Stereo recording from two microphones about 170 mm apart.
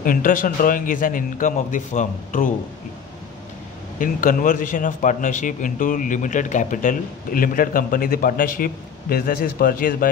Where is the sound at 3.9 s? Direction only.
55° left (ahead or behind).